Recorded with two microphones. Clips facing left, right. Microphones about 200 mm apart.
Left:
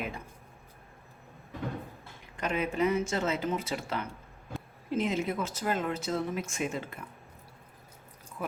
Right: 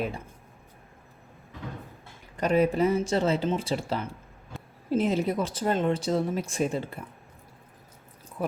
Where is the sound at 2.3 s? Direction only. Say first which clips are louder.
Right 8 dB; 35° right (ahead or behind).